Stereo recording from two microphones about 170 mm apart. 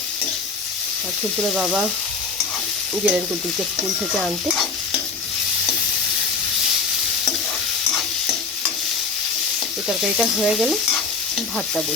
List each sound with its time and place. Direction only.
1.4 s stir: centre (ahead or behind)
2.9 s stir: centre (ahead or behind)
10.0 s stir: centre (ahead or behind)